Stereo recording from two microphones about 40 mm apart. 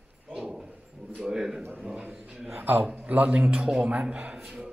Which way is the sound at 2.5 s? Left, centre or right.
Right.